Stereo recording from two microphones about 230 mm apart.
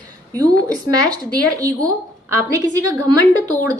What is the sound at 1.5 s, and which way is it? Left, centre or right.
A woman's voice, centre.